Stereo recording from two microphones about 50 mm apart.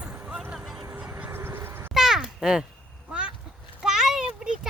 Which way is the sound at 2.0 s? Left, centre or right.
Centre.